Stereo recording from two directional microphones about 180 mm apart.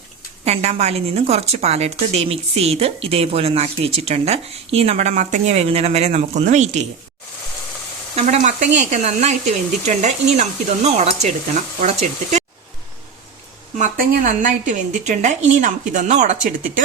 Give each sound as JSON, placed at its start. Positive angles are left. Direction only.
{"t": 0.4, "sound": "a woman's voice", "side_deg": -35}
{"t": 8.1, "sound": "a woman's voice", "side_deg": -40}
{"t": 13.7, "sound": "a woman's voice", "side_deg": -45}